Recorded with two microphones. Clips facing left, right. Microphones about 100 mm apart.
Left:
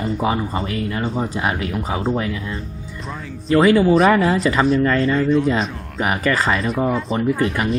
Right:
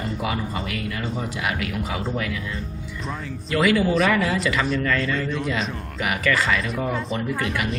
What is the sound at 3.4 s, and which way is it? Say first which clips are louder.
Speech: left 7 dB; 35° left (ahead or behind).